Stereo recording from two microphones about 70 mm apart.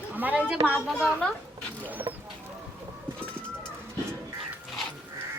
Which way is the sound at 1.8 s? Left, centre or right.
Right.